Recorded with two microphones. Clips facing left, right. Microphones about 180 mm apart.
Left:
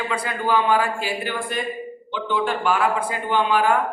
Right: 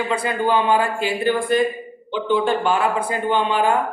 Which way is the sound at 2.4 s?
25° right (ahead or behind).